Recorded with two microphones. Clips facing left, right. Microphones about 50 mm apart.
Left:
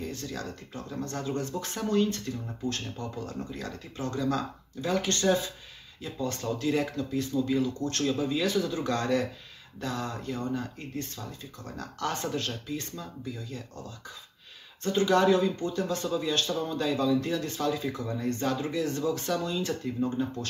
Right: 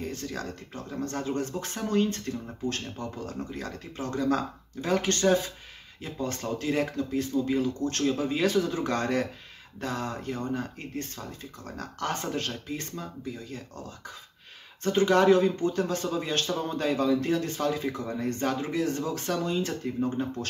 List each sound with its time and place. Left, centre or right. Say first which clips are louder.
0.0 s a man's voice: right 1 dB; right
8.2 s speech: right 2 dB; right
14.8 s a man's voice: right 2 dB; right